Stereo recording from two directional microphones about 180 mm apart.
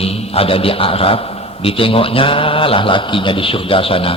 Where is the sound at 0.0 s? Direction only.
35° left (ahead or behind).